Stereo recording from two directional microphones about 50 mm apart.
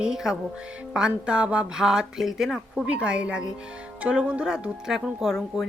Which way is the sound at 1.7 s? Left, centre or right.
Centre.